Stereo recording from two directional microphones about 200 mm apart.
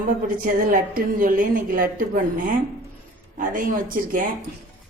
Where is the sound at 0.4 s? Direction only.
45° right (ahead or behind).